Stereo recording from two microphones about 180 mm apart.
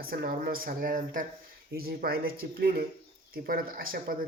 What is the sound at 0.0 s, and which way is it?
Speech, 55° right (ahead or behind).